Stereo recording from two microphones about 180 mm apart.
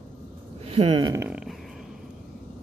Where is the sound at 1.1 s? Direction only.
5° right (ahead or behind).